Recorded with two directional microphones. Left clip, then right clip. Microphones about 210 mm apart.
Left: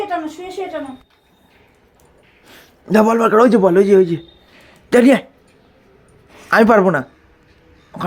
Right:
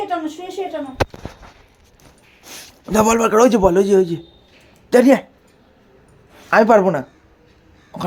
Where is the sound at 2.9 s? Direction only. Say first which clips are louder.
Left 2 dB; 5° left (ahead or behind).